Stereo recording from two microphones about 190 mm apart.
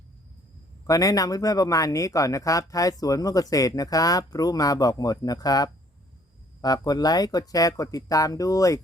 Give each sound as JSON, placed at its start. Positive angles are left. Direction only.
{"t": 0.9, "sound": "speech", "side_deg": 20}